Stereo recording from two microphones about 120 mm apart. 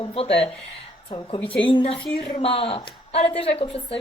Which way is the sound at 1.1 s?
40° left (ahead or behind).